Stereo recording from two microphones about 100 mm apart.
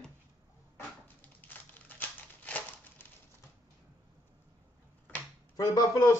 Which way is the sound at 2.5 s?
15° left (ahead or behind).